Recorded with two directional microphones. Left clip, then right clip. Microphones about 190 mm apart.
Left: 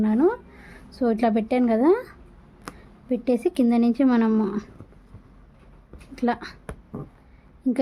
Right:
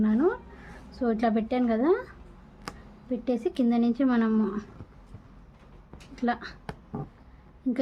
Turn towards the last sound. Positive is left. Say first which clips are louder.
# left 5 dB
turn(degrees=35)  # may be behind; listen again after turning